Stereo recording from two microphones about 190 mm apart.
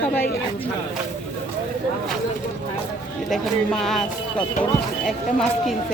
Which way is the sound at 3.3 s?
Centre (ahead or behind).